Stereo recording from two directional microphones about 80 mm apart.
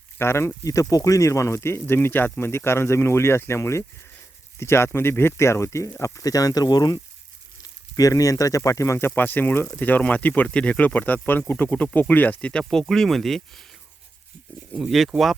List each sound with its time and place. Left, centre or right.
0.2 s speech: left
0.6 s speech: left; by 13.7 s centre
14.8 s speech: centre